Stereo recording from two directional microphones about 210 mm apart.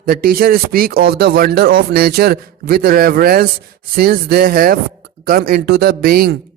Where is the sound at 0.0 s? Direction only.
45° right (ahead or behind).